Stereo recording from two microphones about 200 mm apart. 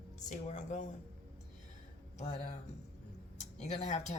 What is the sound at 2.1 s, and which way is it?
Speech, 35° left (ahead or behind).